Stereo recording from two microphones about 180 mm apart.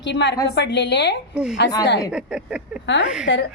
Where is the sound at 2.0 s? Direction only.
5° right (ahead or behind).